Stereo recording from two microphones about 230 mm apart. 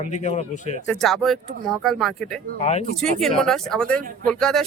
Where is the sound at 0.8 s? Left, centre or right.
Centre.